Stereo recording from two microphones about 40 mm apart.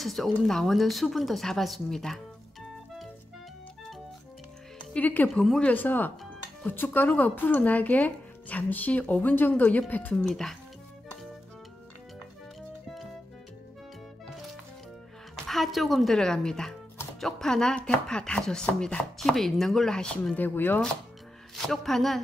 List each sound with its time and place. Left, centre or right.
0.0 s speech: centre
4.9 s speech: left
5.3 s speech: centre
5.8 s speech: left
9.3 s speech: left
9.7 s a woman's voice: left
10.2 s speech: centre
15.4 s a woman's voice: centre
16.2 s speech: centre
18.8 s chopping: left
19.1 s speech: centre
20.3 s speech: left
21.5 s speech: centre